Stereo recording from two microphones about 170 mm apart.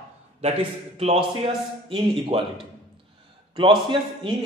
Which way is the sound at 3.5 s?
30° right (ahead or behind).